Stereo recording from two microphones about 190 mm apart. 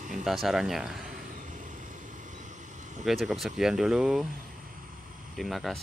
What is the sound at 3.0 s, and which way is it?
Speech, centre (ahead or behind).